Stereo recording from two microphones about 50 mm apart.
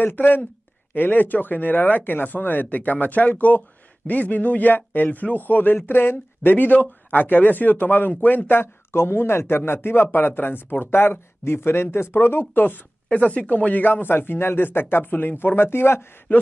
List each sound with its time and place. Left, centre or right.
0.0 s speech: left
8.9 s speech: left
13.1 s speech: left
16.3 s a man's voice: left